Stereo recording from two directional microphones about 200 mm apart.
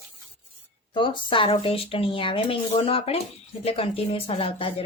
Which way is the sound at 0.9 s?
25° left (ahead or behind).